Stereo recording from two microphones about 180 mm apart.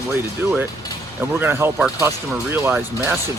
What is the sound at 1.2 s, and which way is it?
Speech, 10° right (ahead or behind).